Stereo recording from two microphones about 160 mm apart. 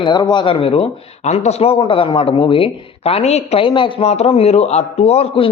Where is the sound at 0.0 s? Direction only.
25° left (ahead or behind).